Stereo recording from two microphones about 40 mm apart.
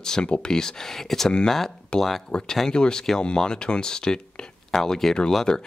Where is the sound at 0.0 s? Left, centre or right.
Centre.